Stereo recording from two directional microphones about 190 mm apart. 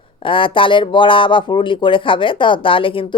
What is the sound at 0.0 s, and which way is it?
Speech, 25° left (ahead or behind).